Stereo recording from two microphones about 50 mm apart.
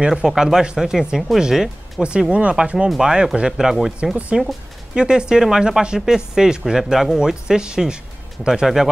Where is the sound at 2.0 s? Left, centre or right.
Right.